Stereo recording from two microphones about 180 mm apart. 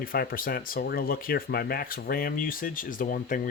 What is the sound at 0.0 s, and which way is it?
Speech, 55° left (ahead or behind).